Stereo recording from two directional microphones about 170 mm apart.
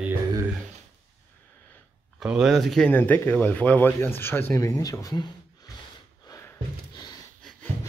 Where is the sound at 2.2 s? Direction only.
5° right (ahead or behind); by 5.3 s 20° left (ahead or behind).